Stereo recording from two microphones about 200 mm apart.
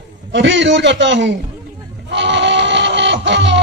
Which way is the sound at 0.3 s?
65° right (ahead or behind).